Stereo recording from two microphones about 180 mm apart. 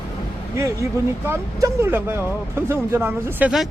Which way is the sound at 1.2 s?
15° right (ahead or behind).